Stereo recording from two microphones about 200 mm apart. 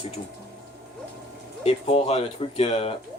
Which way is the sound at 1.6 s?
30° left (ahead or behind).